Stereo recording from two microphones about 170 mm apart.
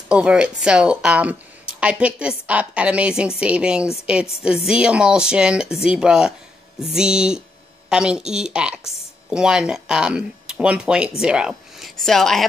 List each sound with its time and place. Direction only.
0.1 s a woman's voice: 5° right (ahead or behind)